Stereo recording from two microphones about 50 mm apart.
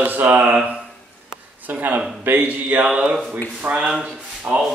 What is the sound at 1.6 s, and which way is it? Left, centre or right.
Speech, right.